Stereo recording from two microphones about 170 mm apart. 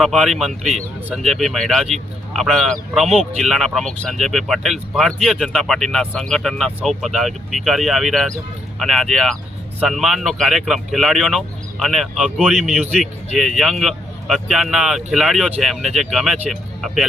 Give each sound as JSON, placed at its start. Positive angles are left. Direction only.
{"t": 0.0, "sound": "speech", "side_deg": 0}